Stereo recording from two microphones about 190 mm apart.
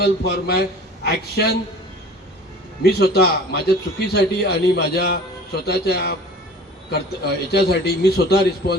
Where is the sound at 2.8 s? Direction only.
55° left (ahead or behind).